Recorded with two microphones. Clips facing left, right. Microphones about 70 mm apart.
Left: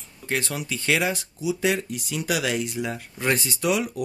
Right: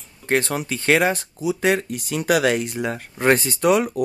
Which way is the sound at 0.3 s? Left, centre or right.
Right.